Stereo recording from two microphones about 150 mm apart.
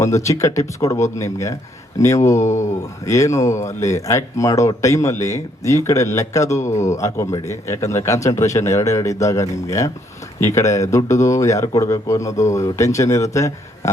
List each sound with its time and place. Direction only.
0.0 s speech: 20° left (ahead or behind)